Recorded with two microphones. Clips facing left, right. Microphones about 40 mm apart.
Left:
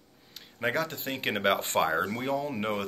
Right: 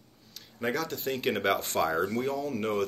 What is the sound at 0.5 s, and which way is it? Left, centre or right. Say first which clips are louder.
Speech: left 1 dB; left.